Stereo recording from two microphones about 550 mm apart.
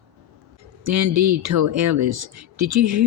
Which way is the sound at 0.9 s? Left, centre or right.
Right.